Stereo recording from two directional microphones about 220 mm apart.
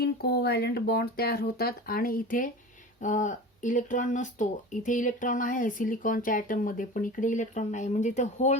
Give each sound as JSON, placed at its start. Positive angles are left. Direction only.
{"t": 0.0, "sound": "speech", "side_deg": 45}